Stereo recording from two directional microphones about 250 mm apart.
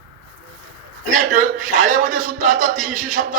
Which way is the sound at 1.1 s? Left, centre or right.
Right.